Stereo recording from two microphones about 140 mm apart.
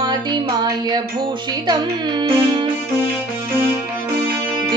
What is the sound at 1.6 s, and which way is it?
Speech, 35° right (ahead or behind).